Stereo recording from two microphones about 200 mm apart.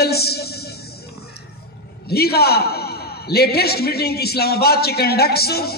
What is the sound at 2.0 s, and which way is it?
A man's voice, 50° left (ahead or behind).